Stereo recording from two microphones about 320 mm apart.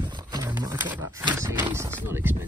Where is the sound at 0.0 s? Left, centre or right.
Centre.